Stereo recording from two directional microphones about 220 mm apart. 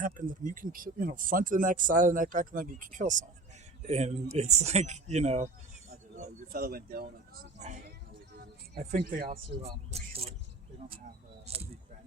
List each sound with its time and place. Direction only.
0.0 s speech: 35° right (ahead or behind)
6.1 s speech: 40° right (ahead or behind)
8.7 s speech: 35° right (ahead or behind)
9.9 s vehicle: 25° right (ahead or behind)
11.4 s a sound: 25° right (ahead or behind)